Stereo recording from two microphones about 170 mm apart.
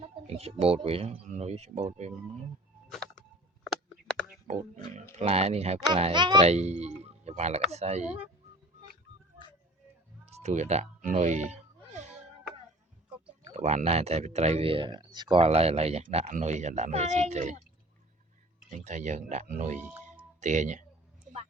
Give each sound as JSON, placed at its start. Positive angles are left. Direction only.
{"t": 0.3, "sound": "speech", "side_deg": -35}
{"t": 2.9, "sound": "a sound", "side_deg": 5}
{"t": 4.4, "sound": "speech", "side_deg": -45}
{"t": 6.4, "sound": "speech", "side_deg": -40}
{"t": 10.2, "sound": "speech", "side_deg": -40}
{"t": 11.9, "sound": "a sound", "side_deg": -40}
{"t": 13.5, "sound": "speech", "side_deg": -40}
{"t": 18.9, "sound": "speech", "side_deg": -45}